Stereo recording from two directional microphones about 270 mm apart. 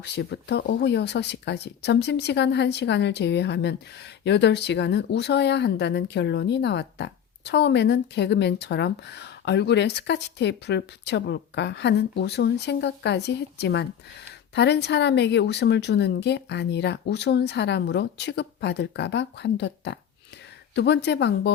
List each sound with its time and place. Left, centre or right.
0.2 s speech: left